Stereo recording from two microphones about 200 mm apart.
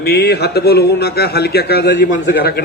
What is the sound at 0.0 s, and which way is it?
A man's voice, 50° left (ahead or behind).